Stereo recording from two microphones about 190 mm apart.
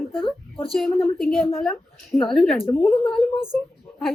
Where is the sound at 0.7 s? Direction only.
Centre (ahead or behind).